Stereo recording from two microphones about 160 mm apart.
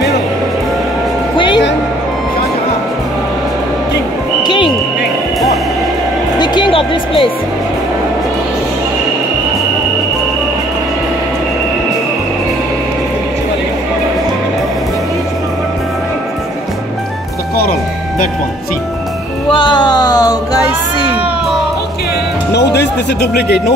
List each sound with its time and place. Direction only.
1.3 s music: 30° left (ahead or behind)
4.4 s a sound: 25° left (ahead or behind)
6.4 s music: 30° left (ahead or behind)
19.5 s music: 30° left (ahead or behind)
22.5 s music: 90° left